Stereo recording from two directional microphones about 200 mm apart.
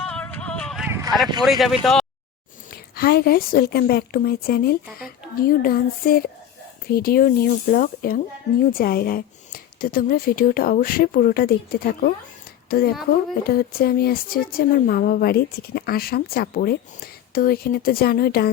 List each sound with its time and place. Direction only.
0.0 s music: 5° left (ahead or behind)
0.9 s a sound: 15° right (ahead or behind)
1.4 s speech: centre (ahead or behind)
2.6 s speech: 50° left (ahead or behind)